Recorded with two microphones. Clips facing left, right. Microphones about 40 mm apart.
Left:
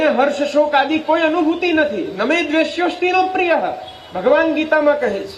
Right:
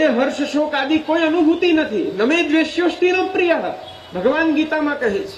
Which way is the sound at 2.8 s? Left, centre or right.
Centre.